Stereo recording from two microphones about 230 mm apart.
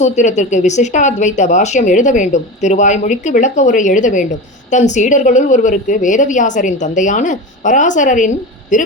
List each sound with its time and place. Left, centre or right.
0.0 s speech: left